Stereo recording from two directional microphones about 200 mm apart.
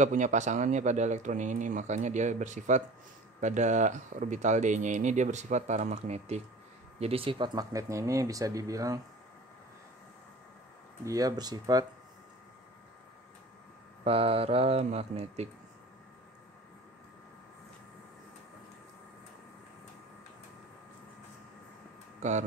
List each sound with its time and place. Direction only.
0.0 s speech: 40° right (ahead or behind); by 9.0 s 15° right (ahead or behind)
11.1 s speech: 20° right (ahead or behind)
14.0 s speech: 30° right (ahead or behind)